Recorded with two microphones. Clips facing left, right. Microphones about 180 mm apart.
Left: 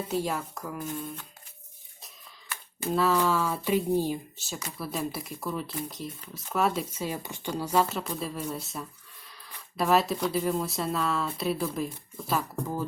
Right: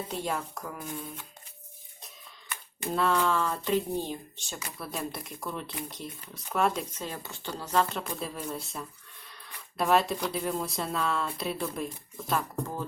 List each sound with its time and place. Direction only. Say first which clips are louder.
0.1 s speech: left 3 dB; centre (ahead or behind)
2.5 s speech: left 3 dB; centre (ahead or behind)